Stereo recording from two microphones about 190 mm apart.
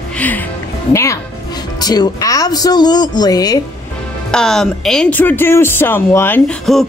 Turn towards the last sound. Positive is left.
turn(degrees=5)  # may be behind; listen again after turning